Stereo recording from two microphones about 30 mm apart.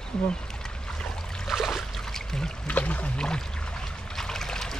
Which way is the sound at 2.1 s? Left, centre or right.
Centre.